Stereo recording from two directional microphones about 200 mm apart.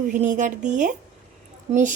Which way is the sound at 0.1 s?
40° right (ahead or behind).